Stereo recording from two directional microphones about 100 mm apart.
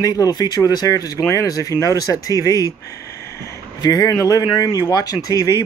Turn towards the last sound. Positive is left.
turn(degrees=40)  # may be behind; listen again after turning